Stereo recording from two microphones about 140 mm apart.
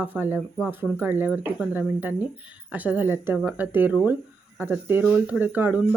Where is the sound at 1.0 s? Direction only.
15° right (ahead or behind).